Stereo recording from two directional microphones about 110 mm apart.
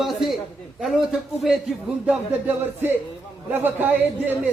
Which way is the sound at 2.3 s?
15° right (ahead or behind).